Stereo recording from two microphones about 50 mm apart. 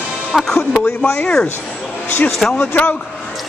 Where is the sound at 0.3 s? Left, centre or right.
Centre.